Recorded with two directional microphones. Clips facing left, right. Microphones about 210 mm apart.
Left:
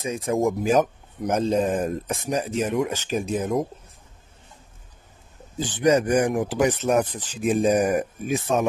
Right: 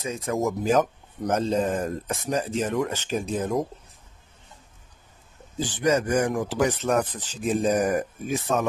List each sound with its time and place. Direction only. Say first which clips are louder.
0.0 s speech: left 3 dB; 25° left (ahead or behind)
1.3 s speech: left 2 dB; 15° left (ahead or behind)
2.2 s speech: left 1 dB; 15° left (ahead or behind)
5.7 s speech: left 4 dB; 20° left (ahead or behind)